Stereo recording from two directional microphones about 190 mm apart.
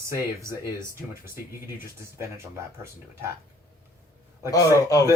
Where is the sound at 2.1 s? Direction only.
15° right (ahead or behind).